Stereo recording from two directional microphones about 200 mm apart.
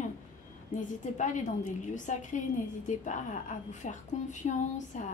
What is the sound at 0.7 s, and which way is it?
A woman's voice, 40° left (ahead or behind).